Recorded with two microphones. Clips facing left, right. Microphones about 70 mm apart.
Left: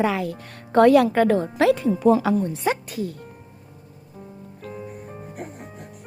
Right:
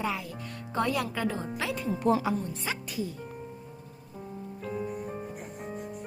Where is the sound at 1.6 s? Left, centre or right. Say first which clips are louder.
Left 10 dB; left.